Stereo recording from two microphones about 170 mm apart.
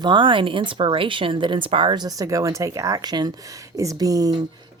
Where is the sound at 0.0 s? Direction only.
30° right (ahead or behind).